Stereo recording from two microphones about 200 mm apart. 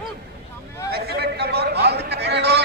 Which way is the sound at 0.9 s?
55° right (ahead or behind).